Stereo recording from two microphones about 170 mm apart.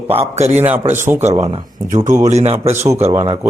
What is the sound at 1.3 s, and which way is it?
A man's voice, 30° right (ahead or behind).